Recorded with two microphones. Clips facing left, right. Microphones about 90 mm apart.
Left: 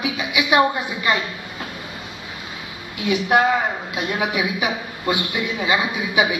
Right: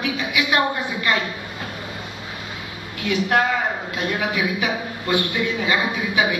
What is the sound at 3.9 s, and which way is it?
A man's voice, 15° left (ahead or behind).